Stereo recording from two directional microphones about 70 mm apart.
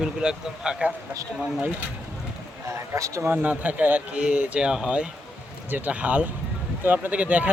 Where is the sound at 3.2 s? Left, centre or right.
Right.